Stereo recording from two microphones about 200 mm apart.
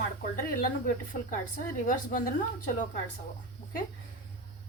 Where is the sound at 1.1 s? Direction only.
40° left (ahead or behind).